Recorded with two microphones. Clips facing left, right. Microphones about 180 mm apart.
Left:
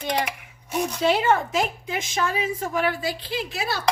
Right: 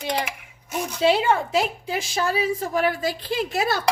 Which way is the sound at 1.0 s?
30° right (ahead or behind).